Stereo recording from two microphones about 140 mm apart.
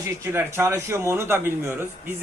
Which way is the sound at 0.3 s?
20° right (ahead or behind).